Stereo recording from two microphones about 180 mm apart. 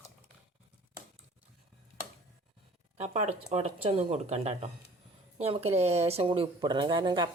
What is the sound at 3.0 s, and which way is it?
Speech, 35° right (ahead or behind).